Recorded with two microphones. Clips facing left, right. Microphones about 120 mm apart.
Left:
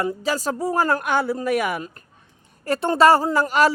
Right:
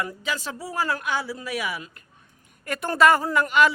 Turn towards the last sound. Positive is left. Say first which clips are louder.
# left 2 dB
turn(degrees=35)  # may be behind; listen again after turning